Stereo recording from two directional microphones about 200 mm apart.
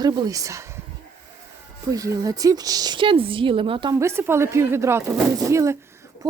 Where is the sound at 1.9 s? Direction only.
15° right (ahead or behind).